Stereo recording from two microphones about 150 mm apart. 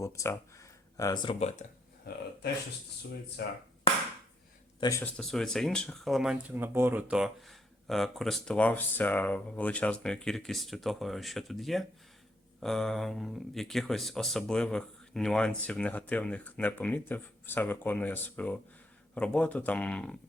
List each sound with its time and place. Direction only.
0.0 s speech: 20° left (ahead or behind)
1.4 s speech: 45° left (ahead or behind)
3.4 s speech: 90° left
4.8 s speech: 20° left (ahead or behind)
5.0 s speech: 5° left (ahead or behind)